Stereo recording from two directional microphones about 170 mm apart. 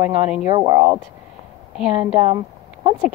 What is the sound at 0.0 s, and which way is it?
Speech, 10° right (ahead or behind).